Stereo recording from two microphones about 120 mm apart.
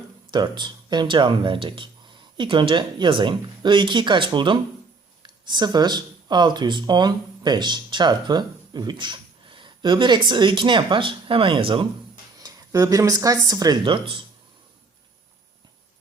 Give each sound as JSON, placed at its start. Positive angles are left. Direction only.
{"t": 0.3, "sound": "speech", "side_deg": -40}
{"t": 12.4, "sound": "speech", "side_deg": -30}